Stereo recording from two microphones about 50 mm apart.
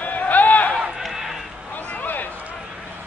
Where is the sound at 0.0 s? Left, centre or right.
Left.